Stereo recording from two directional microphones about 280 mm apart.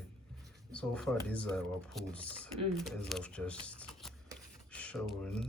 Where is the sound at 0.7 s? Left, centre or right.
Centre.